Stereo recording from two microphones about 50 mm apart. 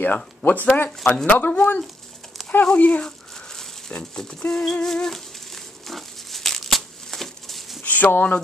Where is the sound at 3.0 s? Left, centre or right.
Centre.